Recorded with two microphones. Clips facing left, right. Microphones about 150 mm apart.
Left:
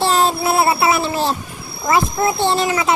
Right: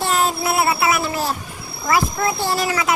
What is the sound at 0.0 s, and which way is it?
Child singing, 30° left (ahead or behind).